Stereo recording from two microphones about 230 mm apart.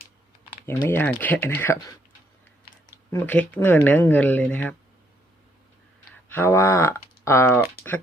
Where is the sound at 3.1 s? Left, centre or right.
Centre.